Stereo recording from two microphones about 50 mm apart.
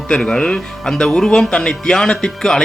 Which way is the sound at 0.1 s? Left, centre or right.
Centre.